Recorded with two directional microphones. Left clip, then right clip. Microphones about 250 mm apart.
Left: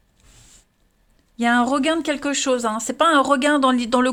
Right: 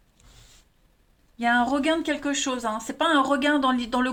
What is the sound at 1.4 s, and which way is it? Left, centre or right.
Speech, left.